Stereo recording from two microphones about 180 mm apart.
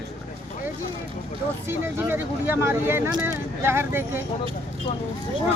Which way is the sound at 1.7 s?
10° right (ahead or behind).